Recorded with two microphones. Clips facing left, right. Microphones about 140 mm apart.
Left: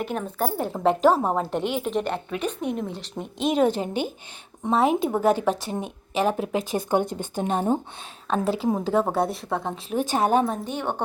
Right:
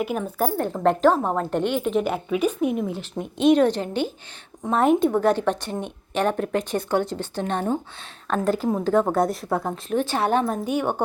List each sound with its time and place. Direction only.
0.0 s a woman's voice: 5° right (ahead or behind)
0.5 s a woman's voice: 10° left (ahead or behind)
8.3 s a woman's voice: centre (ahead or behind)
10.5 s a woman's voice: 10° right (ahead or behind)